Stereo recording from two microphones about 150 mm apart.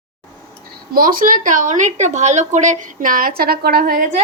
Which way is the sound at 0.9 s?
70° right (ahead or behind).